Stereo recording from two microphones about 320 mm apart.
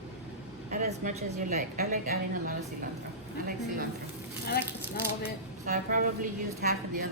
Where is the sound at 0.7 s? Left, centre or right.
Right.